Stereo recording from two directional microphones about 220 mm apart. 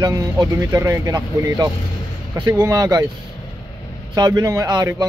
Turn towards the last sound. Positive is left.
turn(degrees=-15)  # may be behind; listen again after turning